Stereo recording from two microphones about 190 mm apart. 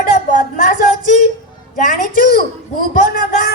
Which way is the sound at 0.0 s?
45° left (ahead or behind).